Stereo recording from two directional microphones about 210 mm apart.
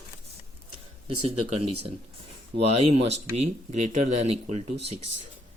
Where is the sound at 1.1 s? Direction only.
25° right (ahead or behind).